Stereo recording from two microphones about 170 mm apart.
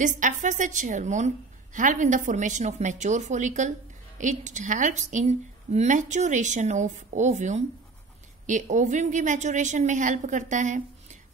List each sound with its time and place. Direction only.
0.0 s a woman's voice: 50° right (ahead or behind)